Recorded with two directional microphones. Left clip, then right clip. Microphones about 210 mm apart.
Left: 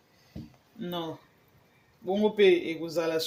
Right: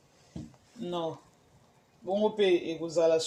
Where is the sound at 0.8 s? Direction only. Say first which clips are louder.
Even; 45° left (ahead or behind).